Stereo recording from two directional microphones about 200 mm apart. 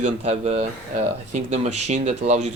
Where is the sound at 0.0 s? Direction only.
30° right (ahead or behind).